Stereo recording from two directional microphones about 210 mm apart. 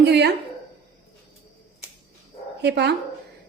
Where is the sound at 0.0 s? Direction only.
55° right (ahead or behind).